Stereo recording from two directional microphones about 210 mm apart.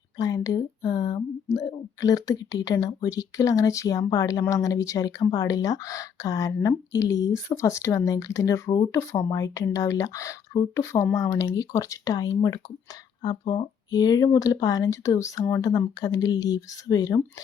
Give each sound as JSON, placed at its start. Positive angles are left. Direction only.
{"t": 0.2, "sound": "speech", "side_deg": 15}